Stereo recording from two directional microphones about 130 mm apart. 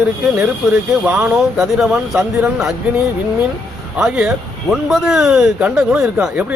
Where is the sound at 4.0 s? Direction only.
5° right (ahead or behind).